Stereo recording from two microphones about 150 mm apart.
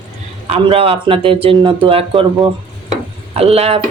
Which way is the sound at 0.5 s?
40° right (ahead or behind).